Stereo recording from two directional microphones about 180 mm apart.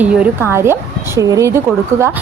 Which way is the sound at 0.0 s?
10° right (ahead or behind).